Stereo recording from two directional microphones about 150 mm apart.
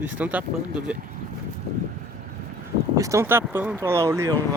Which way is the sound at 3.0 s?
20° right (ahead or behind).